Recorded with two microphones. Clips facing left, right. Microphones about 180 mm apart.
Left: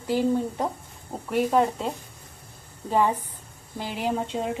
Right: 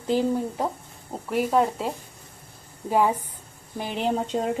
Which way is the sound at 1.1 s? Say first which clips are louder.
Even; centre (ahead or behind).